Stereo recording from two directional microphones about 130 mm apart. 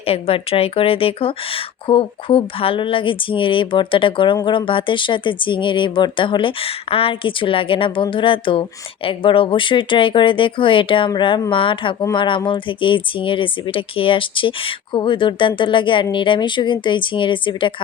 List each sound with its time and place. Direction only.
0.0 s speech: 50° left (ahead or behind)